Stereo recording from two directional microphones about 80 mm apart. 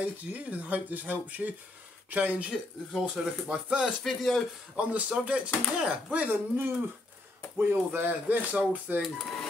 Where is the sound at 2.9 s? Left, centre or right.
Centre.